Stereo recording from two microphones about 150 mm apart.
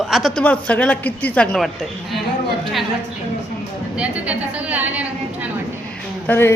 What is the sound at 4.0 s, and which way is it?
A woman's voice, 10° right (ahead or behind).